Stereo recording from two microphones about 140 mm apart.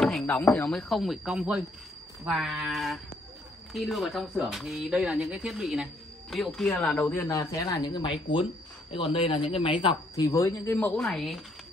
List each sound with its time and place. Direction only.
0.3 s speech: 10° left (ahead or behind)
7.0 s a man's voice: 15° left (ahead or behind)
7.2 s a man's voice: 25° left (ahead or behind)
10.3 s a man's voice: 20° left (ahead or behind)
10.8 s speech: centre (ahead or behind)